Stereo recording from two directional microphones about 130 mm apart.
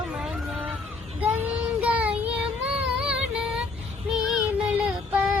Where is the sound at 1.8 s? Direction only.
10° right (ahead or behind).